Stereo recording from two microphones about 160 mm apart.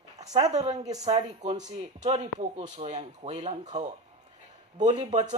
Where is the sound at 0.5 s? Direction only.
45° right (ahead or behind).